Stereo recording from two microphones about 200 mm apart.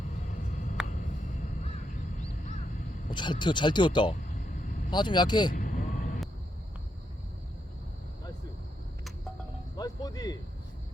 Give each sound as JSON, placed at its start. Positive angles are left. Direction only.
{"t": 0.3, "sound": "a sound", "side_deg": 40}
{"t": 3.1, "sound": "speech", "side_deg": 20}
{"t": 4.4, "sound": "vehicle", "side_deg": 40}
{"t": 4.9, "sound": "speech", "side_deg": 20}
{"t": 5.5, "sound": "vehicle", "side_deg": 40}
{"t": 9.7, "sound": "music", "side_deg": 20}